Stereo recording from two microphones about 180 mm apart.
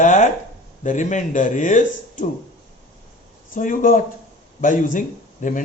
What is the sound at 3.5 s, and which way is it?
Speech, 50° left (ahead or behind).